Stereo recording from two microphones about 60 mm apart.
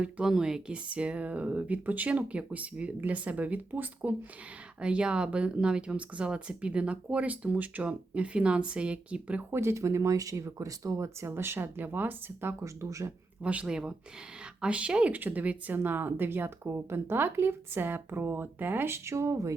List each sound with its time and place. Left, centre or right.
0.0 s speech: centre
9.5 s speech: right
11.3 s speech: right
12.6 s speech: right
13.4 s speech: right